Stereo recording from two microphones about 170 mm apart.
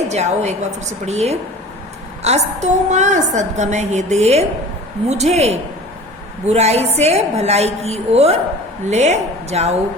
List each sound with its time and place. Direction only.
0.1 s a woman's voice: 40° right (ahead or behind)